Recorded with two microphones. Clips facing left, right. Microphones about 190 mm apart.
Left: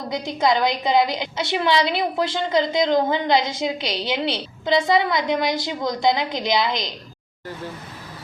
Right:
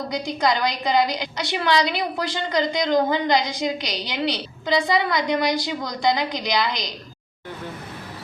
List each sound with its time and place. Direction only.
0.4 s a woman's voice: 25° left (ahead or behind)
4.7 s a woman's voice: centre (ahead or behind)
5.5 s a woman's voice: 25° left (ahead or behind)